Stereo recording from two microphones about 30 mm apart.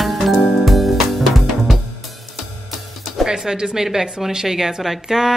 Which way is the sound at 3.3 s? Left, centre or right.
Centre.